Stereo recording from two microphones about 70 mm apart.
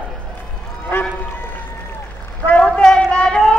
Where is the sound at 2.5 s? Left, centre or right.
Centre.